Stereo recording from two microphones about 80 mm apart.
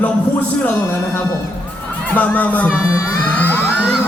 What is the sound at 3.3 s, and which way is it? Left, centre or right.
Music, centre.